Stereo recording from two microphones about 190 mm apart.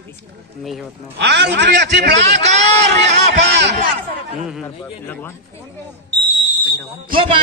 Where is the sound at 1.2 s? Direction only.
65° right (ahead or behind).